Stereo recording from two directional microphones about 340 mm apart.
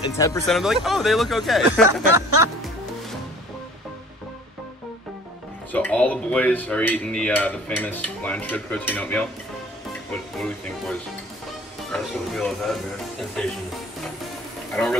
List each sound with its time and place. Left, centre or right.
0.2 s dishes: centre
5.7 s dishes: centre
14.7 s speech: centre